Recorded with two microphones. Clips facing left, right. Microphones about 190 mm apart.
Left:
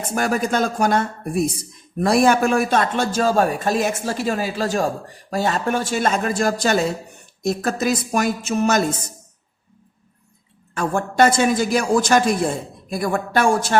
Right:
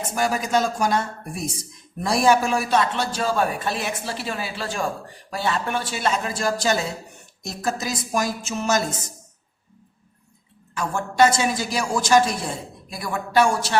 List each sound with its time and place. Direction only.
0.1 s a woman's voice: 55° left (ahead or behind)
10.8 s a woman's voice: 55° left (ahead or behind)